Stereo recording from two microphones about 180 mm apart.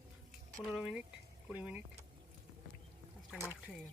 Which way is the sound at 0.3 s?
5° right (ahead or behind).